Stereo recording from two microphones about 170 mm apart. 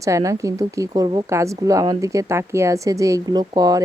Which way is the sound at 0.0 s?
20° right (ahead or behind).